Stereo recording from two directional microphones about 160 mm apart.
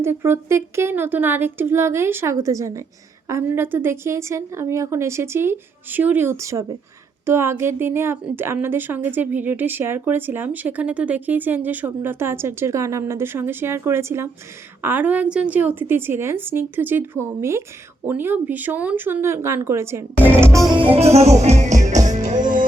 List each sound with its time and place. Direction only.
0.0 s a woman's voice: 15° right (ahead or behind)
20.9 s music: 40° right (ahead or behind)